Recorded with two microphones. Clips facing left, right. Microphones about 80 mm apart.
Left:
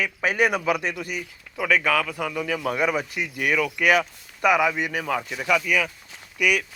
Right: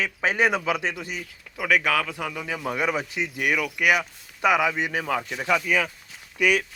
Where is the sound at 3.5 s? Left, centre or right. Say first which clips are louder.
Left 3 dB; centre.